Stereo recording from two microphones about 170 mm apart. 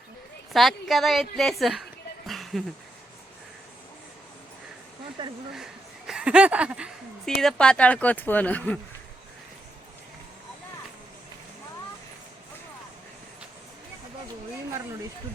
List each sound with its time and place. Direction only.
0.5 s a woman's voice: centre (ahead or behind)
2.2 s a sound: centre (ahead or behind)
5.2 s speech: 30° right (ahead or behind)
6.1 s a woman's voice: 5° right (ahead or behind)